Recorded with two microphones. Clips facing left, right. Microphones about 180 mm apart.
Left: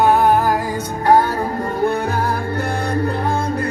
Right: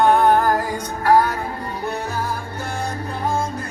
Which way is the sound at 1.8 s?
60° left (ahead or behind).